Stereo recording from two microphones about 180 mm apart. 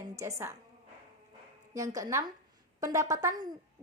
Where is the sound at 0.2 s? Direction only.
15° right (ahead or behind).